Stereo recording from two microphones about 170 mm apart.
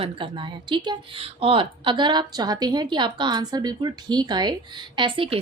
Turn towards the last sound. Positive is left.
turn(degrees=-30)  # may be behind; listen again after turning